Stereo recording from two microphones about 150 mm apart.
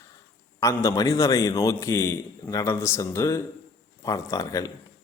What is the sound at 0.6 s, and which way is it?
A man's voice, 20° left (ahead or behind).